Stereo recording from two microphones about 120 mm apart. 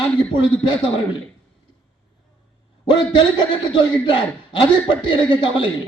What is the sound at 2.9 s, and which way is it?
A man's voice, 40° left (ahead or behind).